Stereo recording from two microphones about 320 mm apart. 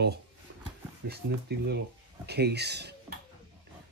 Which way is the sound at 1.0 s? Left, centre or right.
Right.